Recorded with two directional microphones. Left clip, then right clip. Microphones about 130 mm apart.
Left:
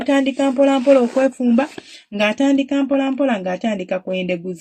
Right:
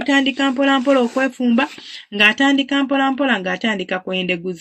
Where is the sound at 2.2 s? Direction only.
90° left.